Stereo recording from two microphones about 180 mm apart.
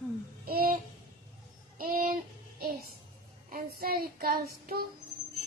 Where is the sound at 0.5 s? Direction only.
55° right (ahead or behind).